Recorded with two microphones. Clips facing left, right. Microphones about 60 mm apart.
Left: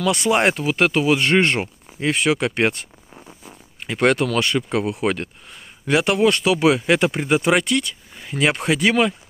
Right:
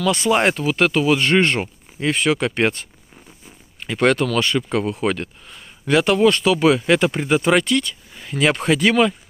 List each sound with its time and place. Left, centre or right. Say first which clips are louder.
0.0 s speech: right 1 dB; left